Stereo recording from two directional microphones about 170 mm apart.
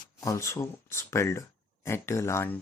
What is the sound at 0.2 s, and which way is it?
Speech, 20° left (ahead or behind).